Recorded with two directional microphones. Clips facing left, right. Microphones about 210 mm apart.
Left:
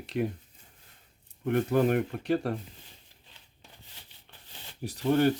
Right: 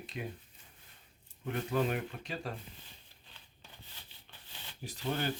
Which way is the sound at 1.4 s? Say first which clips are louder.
Left 8 dB; 60° left (ahead or behind).